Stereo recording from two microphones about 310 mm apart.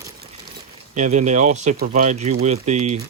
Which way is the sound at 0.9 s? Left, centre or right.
Right.